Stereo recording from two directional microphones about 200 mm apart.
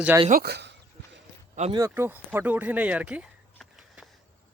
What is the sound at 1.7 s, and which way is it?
Speech, 15° right (ahead or behind).